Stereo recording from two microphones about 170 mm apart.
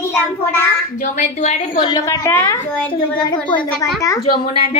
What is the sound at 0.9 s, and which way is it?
Speech, 45° left (ahead or behind).